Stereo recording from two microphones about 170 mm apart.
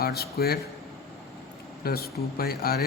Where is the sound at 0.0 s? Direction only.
65° left (ahead or behind).